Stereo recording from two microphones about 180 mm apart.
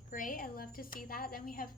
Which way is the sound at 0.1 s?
50° left (ahead or behind).